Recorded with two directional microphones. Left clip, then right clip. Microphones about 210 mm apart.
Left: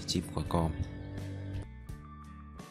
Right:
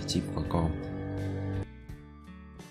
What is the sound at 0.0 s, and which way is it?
Speech, 20° left (ahead or behind).